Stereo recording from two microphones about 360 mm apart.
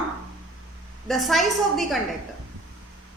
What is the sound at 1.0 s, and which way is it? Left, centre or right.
Speech, centre.